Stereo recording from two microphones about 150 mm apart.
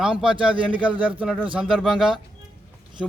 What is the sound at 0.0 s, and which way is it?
Speech, 5° right (ahead or behind).